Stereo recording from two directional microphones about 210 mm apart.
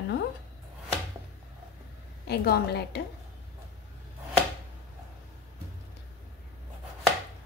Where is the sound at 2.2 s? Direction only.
50° left (ahead or behind).